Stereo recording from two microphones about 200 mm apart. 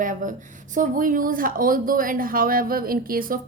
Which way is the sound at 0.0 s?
40° right (ahead or behind).